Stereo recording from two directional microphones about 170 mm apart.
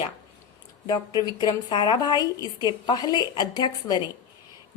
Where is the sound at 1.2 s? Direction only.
25° left (ahead or behind).